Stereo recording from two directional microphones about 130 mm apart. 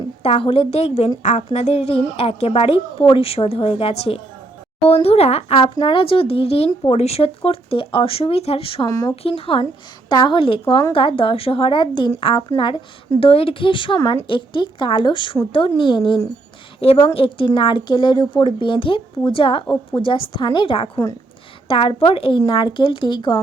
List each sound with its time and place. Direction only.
0.2 s speech: 45° left (ahead or behind)
1.2 s speech: 65° left (ahead or behind); by 8.9 s 45° left (ahead or behind)
8.9 s speech: 30° left (ahead or behind)
9.2 s speech: 45° left (ahead or behind)
10.1 s speech: 35° left (ahead or behind)
16.8 s speech: 50° left (ahead or behind)
20.9 s speech: 30° left (ahead or behind)
21.7 s speech: 40° left (ahead or behind)